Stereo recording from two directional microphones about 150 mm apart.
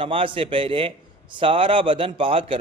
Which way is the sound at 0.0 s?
35° right (ahead or behind).